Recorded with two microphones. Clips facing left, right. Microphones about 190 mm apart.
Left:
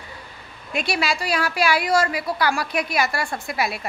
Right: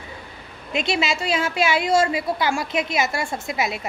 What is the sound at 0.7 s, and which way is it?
A woman's voice, 20° right (ahead or behind).